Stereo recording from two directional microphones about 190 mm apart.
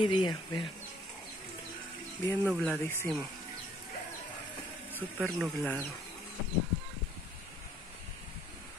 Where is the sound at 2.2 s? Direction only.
10° left (ahead or behind).